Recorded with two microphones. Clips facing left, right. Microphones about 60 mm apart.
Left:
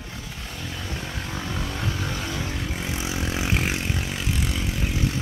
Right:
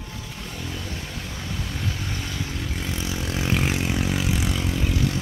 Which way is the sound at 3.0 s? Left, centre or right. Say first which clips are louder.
Right 1 dB; left.